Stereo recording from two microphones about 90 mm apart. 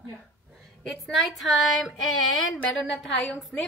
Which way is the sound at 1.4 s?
Centre (ahead or behind).